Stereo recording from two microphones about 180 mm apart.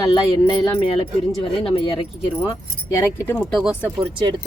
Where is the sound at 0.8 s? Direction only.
30° left (ahead or behind).